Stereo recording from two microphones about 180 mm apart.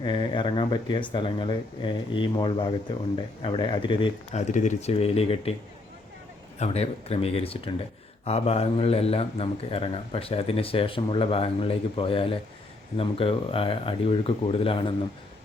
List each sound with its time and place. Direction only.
0.0 s speech: 25° left (ahead or behind)
6.6 s speech: 35° left (ahead or behind)